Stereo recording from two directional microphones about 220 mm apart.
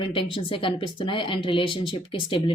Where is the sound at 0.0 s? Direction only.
25° left (ahead or behind).